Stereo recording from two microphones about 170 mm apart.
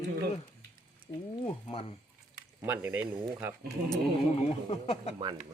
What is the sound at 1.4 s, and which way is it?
Speech, 30° left (ahead or behind).